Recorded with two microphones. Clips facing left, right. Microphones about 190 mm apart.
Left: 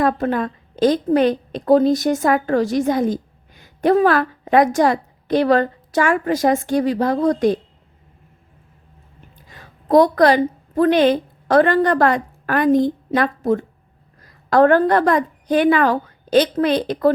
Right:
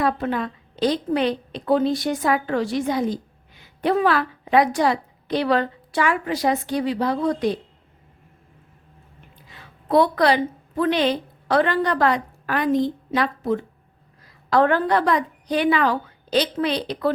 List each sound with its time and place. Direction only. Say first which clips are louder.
0.0 s a woman's voice: left 4 dB; 45° left (ahead or behind)
9.5 s a woman's voice: left 5 dB; 45° left (ahead or behind)